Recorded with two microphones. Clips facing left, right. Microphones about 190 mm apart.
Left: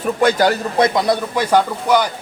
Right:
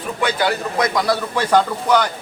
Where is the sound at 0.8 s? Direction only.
25° left (ahead or behind).